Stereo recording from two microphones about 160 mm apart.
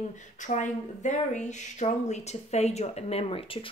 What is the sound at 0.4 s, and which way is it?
A woman's voice, 50° left (ahead or behind).